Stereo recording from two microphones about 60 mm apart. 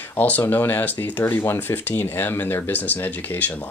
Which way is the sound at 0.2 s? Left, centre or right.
Left.